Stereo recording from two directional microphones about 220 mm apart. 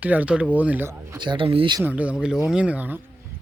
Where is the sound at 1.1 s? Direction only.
20° right (ahead or behind).